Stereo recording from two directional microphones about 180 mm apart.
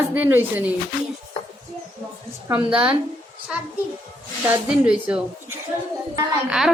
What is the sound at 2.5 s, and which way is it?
Speech, 5° right (ahead or behind).